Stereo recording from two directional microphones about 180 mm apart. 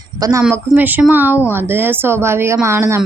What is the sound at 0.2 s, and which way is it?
A child's voice, 15° right (ahead or behind).